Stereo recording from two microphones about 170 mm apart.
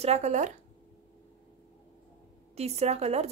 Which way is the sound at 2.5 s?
40° right (ahead or behind).